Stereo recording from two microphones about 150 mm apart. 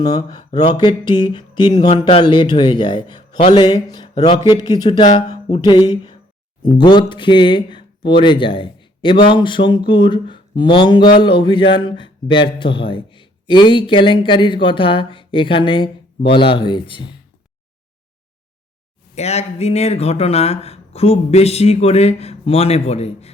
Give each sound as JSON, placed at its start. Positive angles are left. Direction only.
{"t": 0.0, "sound": "speech", "side_deg": 25}
{"t": 19.1, "sound": "speech", "side_deg": 45}